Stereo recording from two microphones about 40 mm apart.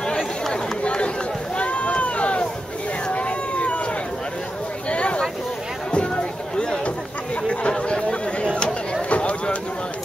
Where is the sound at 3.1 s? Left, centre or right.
Left.